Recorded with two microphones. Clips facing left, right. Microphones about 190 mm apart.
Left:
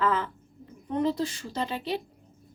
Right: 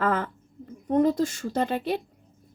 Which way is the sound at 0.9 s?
45° right (ahead or behind).